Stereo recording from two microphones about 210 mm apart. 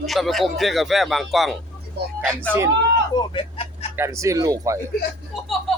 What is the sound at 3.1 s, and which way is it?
Speech, 25° left (ahead or behind).